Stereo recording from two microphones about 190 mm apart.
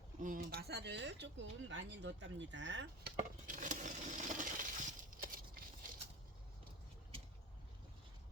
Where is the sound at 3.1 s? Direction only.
45° right (ahead or behind).